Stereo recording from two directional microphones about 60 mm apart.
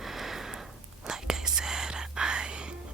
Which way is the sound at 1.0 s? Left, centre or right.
Centre.